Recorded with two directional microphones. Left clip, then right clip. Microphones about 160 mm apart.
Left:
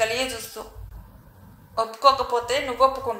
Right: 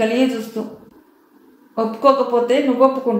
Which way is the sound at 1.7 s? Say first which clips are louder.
Right 4 dB; 50° left (ahead or behind).